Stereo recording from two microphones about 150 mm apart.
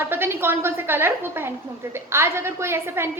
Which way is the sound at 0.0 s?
15° right (ahead or behind).